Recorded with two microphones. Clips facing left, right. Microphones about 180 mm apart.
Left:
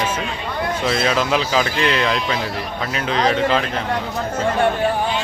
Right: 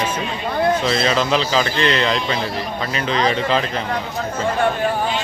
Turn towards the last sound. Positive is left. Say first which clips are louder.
# left 1 dB
turn(degrees=0)  # may be behind; listen again after turning